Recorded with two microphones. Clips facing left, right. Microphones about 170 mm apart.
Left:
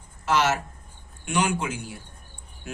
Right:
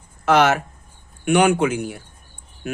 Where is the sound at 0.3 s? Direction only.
60° right (ahead or behind).